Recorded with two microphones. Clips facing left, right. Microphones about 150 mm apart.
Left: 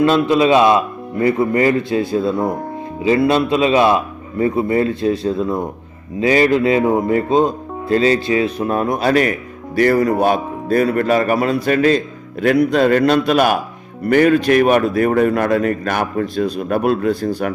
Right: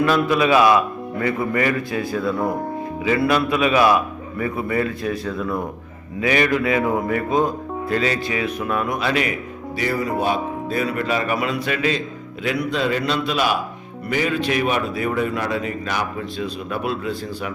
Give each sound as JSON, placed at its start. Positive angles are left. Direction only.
{"t": 0.0, "sound": "speech", "side_deg": 25}